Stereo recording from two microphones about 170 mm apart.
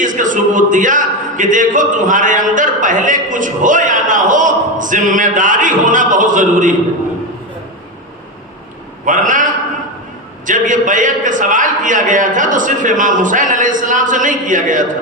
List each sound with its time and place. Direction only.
0.0 s a man's voice: 50° right (ahead or behind)
9.0 s a man's voice: 50° right (ahead or behind)